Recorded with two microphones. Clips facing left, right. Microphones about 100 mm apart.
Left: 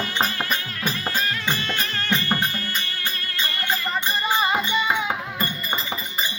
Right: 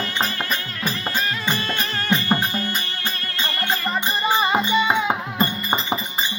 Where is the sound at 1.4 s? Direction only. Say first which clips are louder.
Right 2 dB; 10° right (ahead or behind).